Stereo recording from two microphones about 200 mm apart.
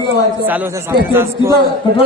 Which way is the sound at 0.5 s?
10° right (ahead or behind).